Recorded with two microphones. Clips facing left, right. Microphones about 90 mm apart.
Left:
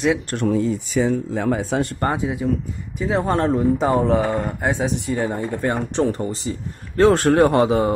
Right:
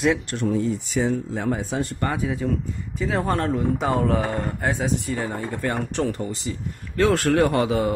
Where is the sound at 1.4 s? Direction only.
90° left.